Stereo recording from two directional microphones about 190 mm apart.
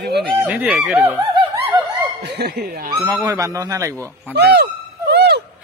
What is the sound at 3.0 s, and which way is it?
Speech, 10° right (ahead or behind).